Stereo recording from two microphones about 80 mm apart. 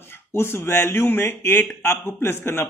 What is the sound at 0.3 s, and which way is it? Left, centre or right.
Speech, left.